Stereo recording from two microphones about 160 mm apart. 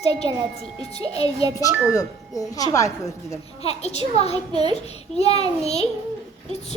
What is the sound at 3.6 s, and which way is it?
Speech, 40° left (ahead or behind).